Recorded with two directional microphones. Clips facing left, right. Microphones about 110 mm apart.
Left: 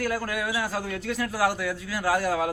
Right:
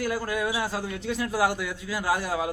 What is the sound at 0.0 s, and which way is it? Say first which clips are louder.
Speech: right 1 dB; 20° right (ahead or behind).